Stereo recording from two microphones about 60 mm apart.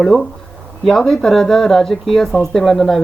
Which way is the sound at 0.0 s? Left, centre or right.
Centre.